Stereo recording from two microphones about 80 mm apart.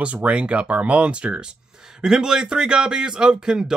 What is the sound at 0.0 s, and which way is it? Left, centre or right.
Speech, centre.